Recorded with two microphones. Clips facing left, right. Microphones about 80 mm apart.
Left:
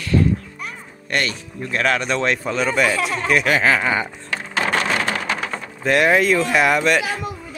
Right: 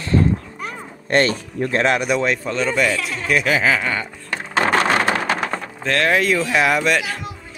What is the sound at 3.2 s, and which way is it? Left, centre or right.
Speech, centre.